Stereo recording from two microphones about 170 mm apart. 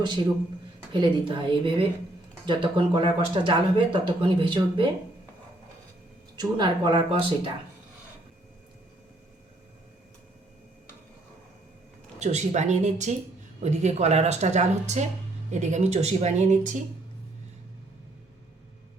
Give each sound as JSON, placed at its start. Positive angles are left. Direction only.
{"t": 0.9, "sound": "speech", "side_deg": -30}
{"t": 6.3, "sound": "speech", "side_deg": -25}
{"t": 12.2, "sound": "a woman's voice", "side_deg": -40}